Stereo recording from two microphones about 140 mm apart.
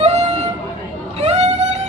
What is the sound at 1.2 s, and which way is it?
Vehicle, 50° right (ahead or behind).